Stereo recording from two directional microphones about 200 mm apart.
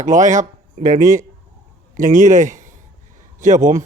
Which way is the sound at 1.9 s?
40° right (ahead or behind).